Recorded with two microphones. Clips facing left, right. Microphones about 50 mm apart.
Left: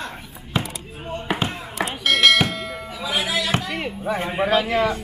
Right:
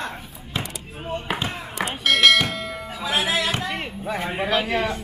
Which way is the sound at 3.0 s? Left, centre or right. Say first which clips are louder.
Right 1 dB; right.